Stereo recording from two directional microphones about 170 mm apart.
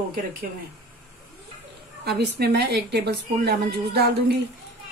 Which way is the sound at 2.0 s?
75° right (ahead or behind).